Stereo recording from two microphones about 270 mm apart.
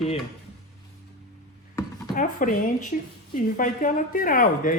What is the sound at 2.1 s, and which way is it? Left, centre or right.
A woman's voice, left.